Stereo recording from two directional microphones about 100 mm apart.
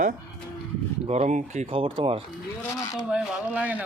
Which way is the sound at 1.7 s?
60° right (ahead or behind).